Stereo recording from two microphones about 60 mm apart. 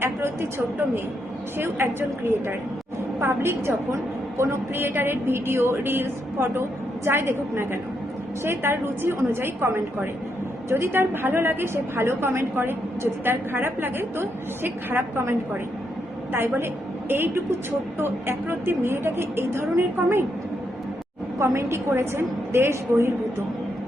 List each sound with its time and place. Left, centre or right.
1.5 s a woman's voice: right
17.1 s a woman's voice: right
21.3 s a woman's voice: right